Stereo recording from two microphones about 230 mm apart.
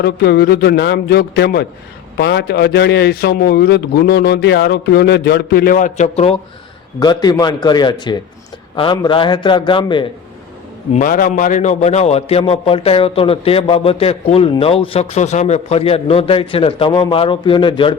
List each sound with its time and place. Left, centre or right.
0.0 s a man's voice: left
7.0 s a man's voice: centre
10.9 s a man's voice: left